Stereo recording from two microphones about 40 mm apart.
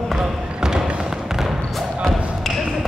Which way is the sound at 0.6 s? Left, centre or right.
Centre.